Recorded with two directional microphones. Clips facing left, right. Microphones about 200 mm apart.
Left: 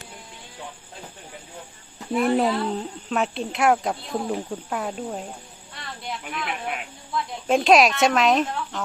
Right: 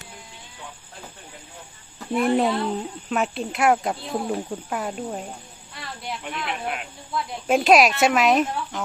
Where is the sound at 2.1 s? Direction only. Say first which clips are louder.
Even; centre (ahead or behind).